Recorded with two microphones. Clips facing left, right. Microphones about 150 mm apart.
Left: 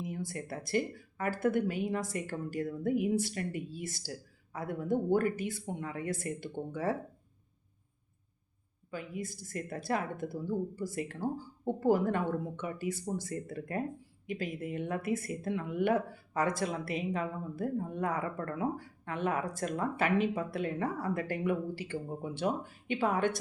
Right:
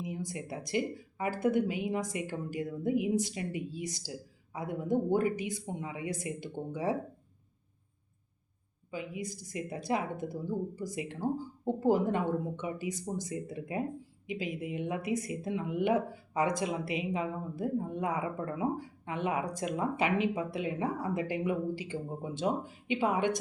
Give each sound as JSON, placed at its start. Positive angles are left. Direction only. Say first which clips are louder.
{"t": 0.0, "sound": "speech", "louder": "even", "side_deg": -20}
{"t": 8.9, "sound": "speech", "louder": "right 1 dB", "side_deg": -15}